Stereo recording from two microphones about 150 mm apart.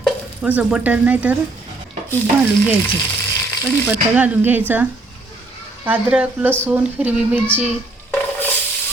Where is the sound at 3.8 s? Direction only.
10° right (ahead or behind).